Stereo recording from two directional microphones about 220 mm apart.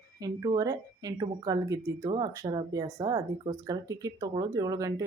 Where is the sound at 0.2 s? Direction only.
15° right (ahead or behind).